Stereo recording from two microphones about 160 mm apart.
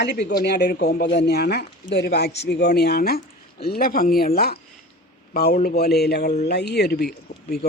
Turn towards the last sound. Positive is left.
turn(degrees=90)